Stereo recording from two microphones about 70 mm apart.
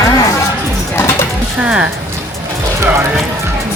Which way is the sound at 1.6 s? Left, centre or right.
Centre.